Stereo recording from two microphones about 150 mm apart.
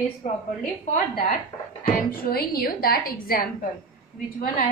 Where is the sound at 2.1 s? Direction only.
85° left.